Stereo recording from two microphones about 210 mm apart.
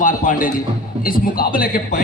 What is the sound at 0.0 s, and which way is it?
A man's voice, 40° left (ahead or behind).